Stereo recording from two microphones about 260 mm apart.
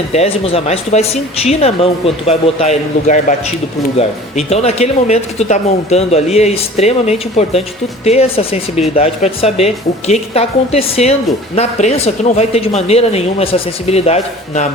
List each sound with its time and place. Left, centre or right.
0.1 s speech: left